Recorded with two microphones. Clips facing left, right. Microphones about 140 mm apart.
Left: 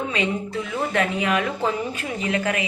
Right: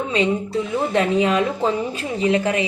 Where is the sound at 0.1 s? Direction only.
30° right (ahead or behind).